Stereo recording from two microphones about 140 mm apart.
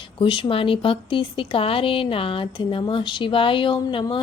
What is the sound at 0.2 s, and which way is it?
Speech, 35° left (ahead or behind).